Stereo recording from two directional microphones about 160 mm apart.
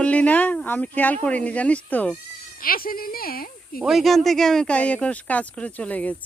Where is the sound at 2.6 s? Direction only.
65° left (ahead or behind).